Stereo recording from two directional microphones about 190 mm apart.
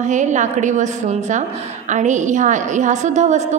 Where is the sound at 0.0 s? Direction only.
40° right (ahead or behind).